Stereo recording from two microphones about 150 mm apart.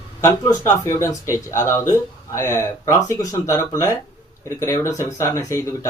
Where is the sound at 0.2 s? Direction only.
20° left (ahead or behind).